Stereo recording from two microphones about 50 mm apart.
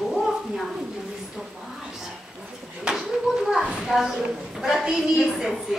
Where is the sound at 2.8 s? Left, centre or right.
Centre.